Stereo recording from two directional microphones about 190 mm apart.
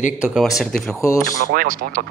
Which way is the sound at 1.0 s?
15° left (ahead or behind).